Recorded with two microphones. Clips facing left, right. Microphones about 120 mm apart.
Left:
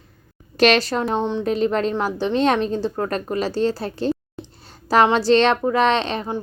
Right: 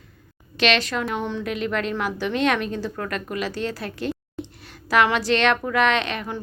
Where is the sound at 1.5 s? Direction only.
35° left (ahead or behind).